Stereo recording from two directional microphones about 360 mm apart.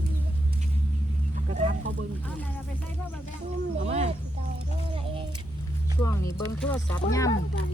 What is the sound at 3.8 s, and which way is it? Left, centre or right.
Speech, centre.